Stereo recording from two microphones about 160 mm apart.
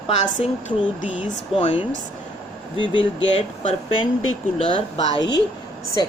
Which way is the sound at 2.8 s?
35° left (ahead or behind).